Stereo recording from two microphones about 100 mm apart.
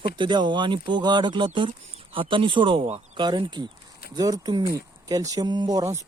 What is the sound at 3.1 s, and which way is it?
Speech, 50° right (ahead or behind).